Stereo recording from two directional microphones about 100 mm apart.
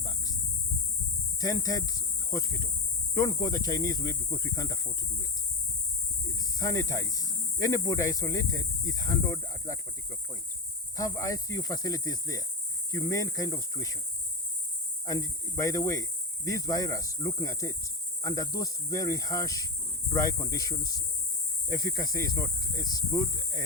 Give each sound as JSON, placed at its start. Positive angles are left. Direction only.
{"t": 1.4, "sound": "speech", "side_deg": 40}
{"t": 6.6, "sound": "speech", "side_deg": 35}
{"t": 10.9, "sound": "speech", "side_deg": 35}
{"t": 15.0, "sound": "speech", "side_deg": 35}